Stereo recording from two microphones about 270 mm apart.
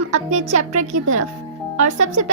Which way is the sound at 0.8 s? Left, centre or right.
Right.